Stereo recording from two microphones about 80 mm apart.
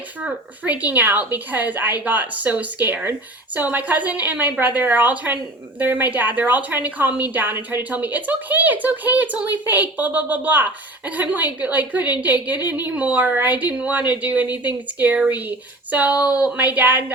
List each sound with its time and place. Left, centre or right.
0.2 s a woman's voice: centre